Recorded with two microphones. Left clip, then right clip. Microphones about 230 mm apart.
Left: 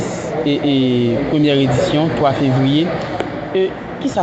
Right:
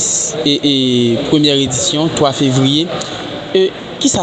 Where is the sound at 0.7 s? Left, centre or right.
Right.